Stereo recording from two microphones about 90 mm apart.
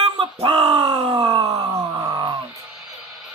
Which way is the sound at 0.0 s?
80° right.